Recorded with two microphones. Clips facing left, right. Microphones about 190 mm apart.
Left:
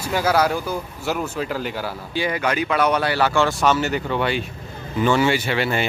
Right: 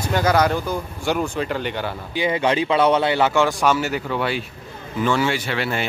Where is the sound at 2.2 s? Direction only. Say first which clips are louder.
Right 2 dB; 25° right (ahead or behind).